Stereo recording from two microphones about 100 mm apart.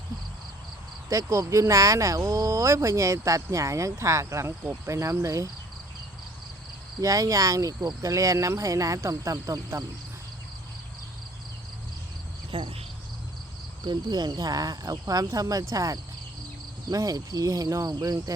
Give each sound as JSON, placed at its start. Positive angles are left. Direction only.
{"t": 1.1, "sound": "speech", "side_deg": -30}
{"t": 7.0, "sound": "speech", "side_deg": -35}
{"t": 12.5, "sound": "cricket", "side_deg": -55}
{"t": 13.8, "sound": "speech", "side_deg": -45}